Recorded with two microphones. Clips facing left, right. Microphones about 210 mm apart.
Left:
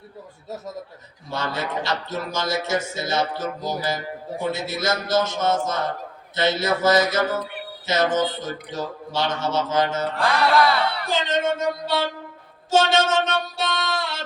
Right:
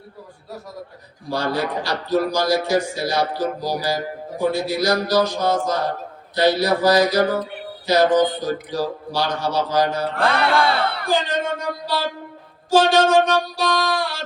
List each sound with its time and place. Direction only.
1.5 s a man's voice: 25° left (ahead or behind)
10.2 s mantra: 60° right (ahead or behind)
10.5 s speech: 25° right (ahead or behind)
11.1 s a man's voice: 25° left (ahead or behind)